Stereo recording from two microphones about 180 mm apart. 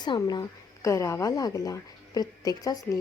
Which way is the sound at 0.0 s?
25° left (ahead or behind).